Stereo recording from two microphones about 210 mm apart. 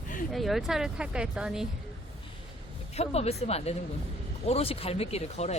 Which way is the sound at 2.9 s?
30° left (ahead or behind).